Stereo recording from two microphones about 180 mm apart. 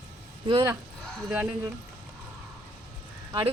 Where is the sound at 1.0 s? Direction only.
5° left (ahead or behind).